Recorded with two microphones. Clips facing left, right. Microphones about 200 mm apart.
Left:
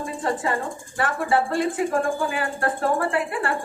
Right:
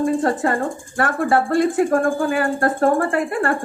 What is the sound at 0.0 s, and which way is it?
Speech, 50° right (ahead or behind).